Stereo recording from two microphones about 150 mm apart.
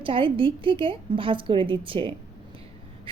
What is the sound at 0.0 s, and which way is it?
A woman's voice, 35° right (ahead or behind).